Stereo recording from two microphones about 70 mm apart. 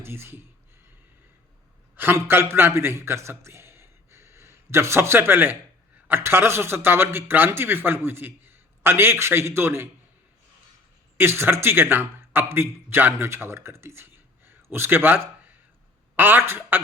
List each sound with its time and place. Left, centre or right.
0.0 s a man's voice: right
2.1 s a man's voice: right
11.2 s a man's voice: right